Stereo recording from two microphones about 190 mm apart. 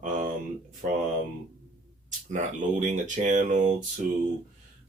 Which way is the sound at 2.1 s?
40° right (ahead or behind).